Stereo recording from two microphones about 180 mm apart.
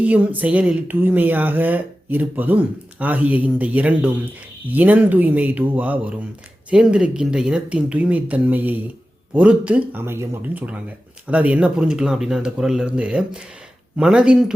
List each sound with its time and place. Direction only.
0.0 s speech: 10° right (ahead or behind)